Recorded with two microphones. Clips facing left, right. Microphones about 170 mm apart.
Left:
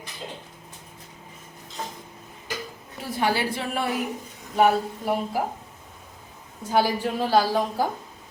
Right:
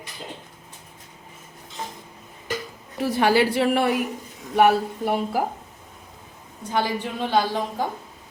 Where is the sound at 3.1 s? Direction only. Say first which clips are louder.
Right 6 dB; 80° right.